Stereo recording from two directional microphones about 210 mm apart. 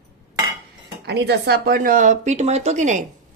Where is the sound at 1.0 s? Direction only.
55° right (ahead or behind); by 3.0 s 35° right (ahead or behind).